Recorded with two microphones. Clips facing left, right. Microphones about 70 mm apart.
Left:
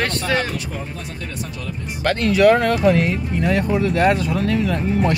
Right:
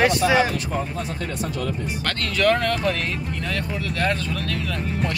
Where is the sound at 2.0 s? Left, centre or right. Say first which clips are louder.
Left 7 dB; centre.